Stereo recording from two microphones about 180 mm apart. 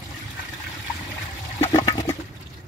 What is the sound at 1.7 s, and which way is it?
Toilet flush, 20° left (ahead or behind).